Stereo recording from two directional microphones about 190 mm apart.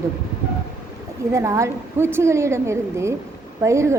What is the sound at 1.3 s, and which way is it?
A woman's voice, 15° right (ahead or behind).